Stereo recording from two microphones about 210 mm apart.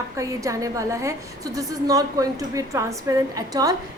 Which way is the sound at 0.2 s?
15° right (ahead or behind).